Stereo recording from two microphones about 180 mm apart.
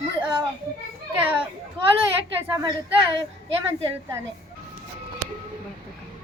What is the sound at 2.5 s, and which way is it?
Speech, 25° right (ahead or behind).